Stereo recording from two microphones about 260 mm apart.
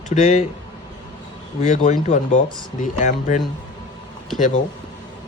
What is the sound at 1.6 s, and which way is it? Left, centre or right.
Speech, left.